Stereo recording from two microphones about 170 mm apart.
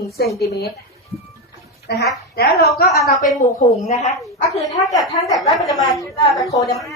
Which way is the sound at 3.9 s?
40° left (ahead or behind).